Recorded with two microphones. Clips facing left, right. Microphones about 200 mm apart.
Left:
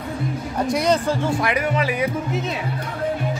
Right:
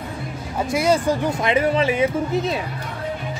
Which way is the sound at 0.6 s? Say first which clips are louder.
Right 1 dB; 5° right (ahead or behind).